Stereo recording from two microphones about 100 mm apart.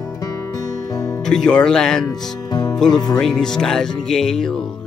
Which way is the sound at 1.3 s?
5° left (ahead or behind).